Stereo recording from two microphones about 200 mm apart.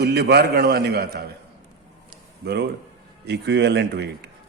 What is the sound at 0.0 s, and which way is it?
A man's voice, 55° right (ahead or behind).